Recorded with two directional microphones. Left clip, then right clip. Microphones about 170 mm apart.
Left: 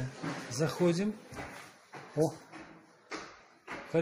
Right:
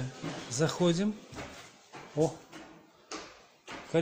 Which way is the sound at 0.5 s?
15° right (ahead or behind).